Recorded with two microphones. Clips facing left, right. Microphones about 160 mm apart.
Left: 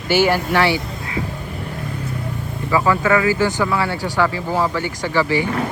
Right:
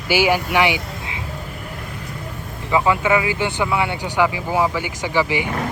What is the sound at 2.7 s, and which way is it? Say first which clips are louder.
Speech: left 1 dB; 15° right (ahead or behind).